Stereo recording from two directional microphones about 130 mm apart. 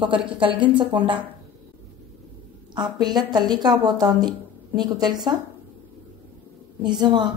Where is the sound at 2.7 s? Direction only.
35° right (ahead or behind).